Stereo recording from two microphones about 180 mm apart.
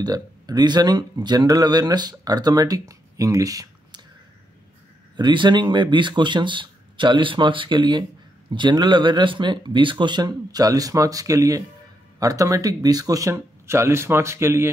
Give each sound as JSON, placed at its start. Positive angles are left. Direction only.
{"t": 0.0, "sound": "speech", "side_deg": -20}
{"t": 5.1, "sound": "speech", "side_deg": -25}